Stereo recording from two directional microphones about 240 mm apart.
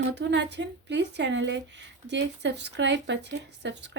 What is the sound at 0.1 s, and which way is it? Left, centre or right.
A woman's voice, right.